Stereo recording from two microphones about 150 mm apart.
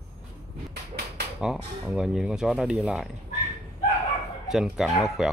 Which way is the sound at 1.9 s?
5° right (ahead or behind).